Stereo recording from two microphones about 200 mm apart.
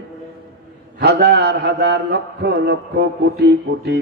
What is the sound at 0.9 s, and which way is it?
A man's voice, 55° right (ahead or behind).